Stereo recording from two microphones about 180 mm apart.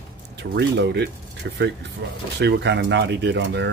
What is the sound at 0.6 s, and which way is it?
Speech, 70° right (ahead or behind).